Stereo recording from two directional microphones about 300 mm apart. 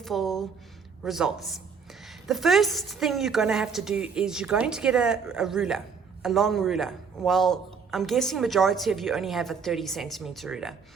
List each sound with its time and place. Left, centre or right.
0.0 s a man's voice: centre